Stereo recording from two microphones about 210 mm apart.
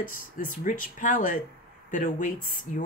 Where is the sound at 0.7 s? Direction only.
40° left (ahead or behind).